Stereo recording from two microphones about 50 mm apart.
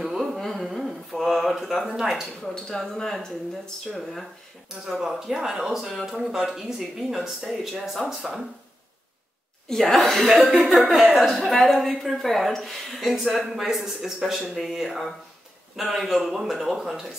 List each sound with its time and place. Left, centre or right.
0.2 s a sound: centre
2.4 s a woman's voice: centre
4.8 s a woman's voice: centre
9.7 s a woman's voice: centre
10.4 s speech: right
10.9 s speech: centre
11.2 s a woman's voice: centre